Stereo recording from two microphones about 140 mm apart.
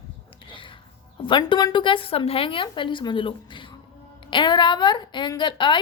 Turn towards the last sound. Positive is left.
turn(degrees=35)  # may be behind; listen again after turning